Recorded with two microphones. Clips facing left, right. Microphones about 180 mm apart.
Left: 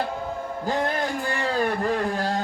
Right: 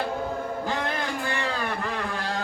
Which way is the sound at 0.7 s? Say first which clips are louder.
Left 7 dB; 40° left (ahead or behind).